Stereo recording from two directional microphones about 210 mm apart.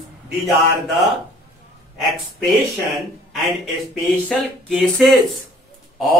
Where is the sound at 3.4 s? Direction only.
Centre (ahead or behind).